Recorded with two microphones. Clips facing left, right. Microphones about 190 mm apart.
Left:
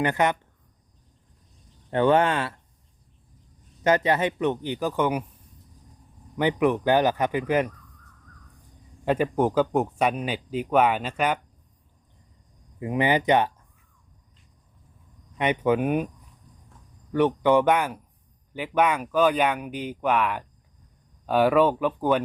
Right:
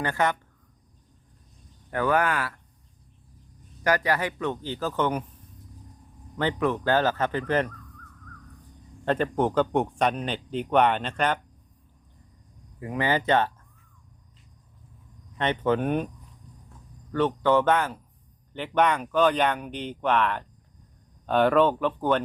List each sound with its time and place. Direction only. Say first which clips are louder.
0.0 s speech: left 3 dB; 20° left (ahead or behind)
1.9 s speech: left 4 dB; 25° left (ahead or behind)
3.8 s speech: left 3 dB; 20° left (ahead or behind)
6.3 s speech: left 4 dB; 15° left (ahead or behind)
9.0 s speech: left 2 dB; 10° left (ahead or behind)
12.8 s speech: left 3 dB; 20° left (ahead or behind)
15.4 s speech: left 2 dB; 10° left (ahead or behind)
17.1 s speech: left 2 dB; 15° left (ahead or behind)